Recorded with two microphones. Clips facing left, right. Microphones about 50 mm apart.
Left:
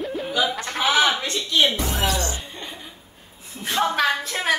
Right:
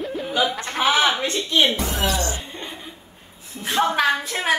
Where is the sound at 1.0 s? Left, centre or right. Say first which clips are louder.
Right 2 dB; right.